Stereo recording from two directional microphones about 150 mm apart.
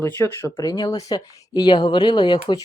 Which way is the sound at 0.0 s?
15° left (ahead or behind).